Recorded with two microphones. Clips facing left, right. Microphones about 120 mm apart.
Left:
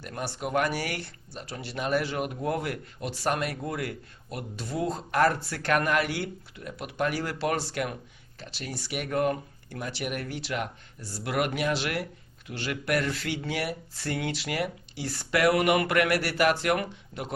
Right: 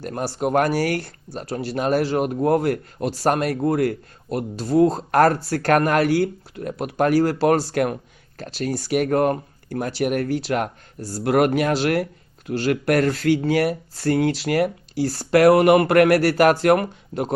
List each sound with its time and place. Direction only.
0.0 s speech: 40° right (ahead or behind)